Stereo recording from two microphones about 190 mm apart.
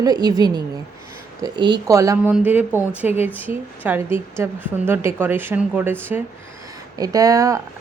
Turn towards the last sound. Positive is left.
turn(degrees=-15)  # may be behind; listen again after turning